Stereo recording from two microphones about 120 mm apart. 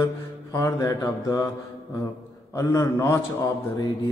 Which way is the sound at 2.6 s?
30° left (ahead or behind).